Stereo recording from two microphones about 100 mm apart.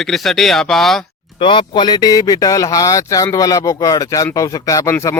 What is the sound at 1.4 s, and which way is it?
A man's voice, 60° left (ahead or behind).